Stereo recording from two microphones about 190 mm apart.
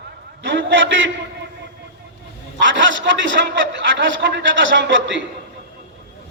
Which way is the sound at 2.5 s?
80° right.